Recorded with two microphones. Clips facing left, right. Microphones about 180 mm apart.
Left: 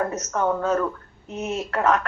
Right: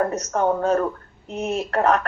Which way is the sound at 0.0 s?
35° right (ahead or behind).